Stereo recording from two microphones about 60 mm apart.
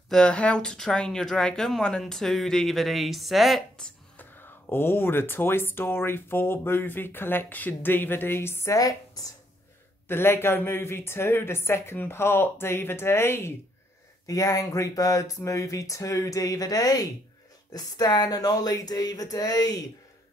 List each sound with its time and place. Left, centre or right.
0.1 s speech: centre
4.2 s speech: left
8.7 s a woman's voice: left
10.0 s speech: left
14.2 s speech: left